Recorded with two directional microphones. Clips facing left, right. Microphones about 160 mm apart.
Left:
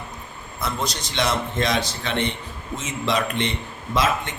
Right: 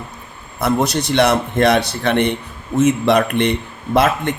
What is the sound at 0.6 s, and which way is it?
Speech, 65° right (ahead or behind).